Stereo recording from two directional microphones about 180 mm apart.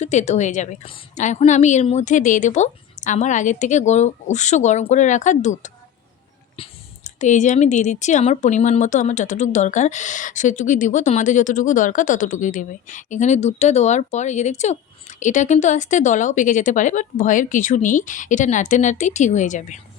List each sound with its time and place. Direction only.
0.0 s a woman's voice: 40° left (ahead or behind)